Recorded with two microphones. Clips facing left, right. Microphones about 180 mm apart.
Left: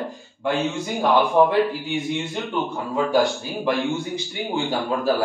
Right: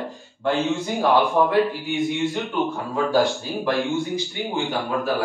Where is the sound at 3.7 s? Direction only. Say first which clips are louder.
Right 1 dB; centre (ahead or behind).